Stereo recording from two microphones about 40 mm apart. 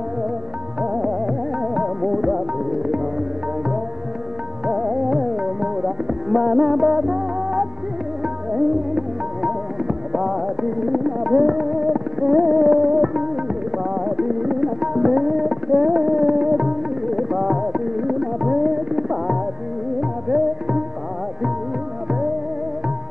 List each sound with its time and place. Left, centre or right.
0.7 s music: right
4.6 s music: centre
14.6 s tabla: centre
15.8 s a sound: right
16.3 s tabla: right
16.6 s tabla: centre
18.2 s music: centre
18.9 s music: right
20.0 s tabla: centre